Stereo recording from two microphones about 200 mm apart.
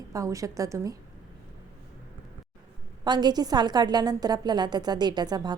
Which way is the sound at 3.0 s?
20° right (ahead or behind).